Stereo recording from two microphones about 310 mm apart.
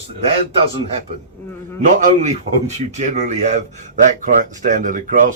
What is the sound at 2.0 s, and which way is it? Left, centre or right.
A man's voice, right.